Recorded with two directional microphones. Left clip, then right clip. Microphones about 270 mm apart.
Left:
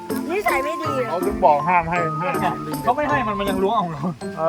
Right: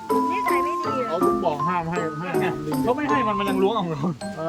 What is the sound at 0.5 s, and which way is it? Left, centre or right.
Music, left.